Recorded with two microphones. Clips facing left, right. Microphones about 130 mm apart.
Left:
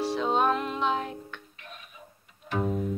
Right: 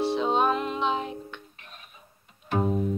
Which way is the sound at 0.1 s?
15° right (ahead or behind).